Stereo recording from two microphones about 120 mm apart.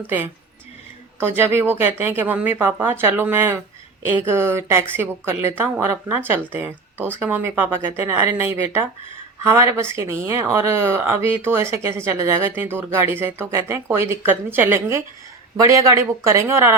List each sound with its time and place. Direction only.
1.4 s speech: 20° right (ahead or behind)